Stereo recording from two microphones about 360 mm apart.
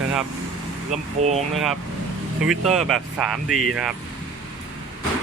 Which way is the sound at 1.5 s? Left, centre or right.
Centre.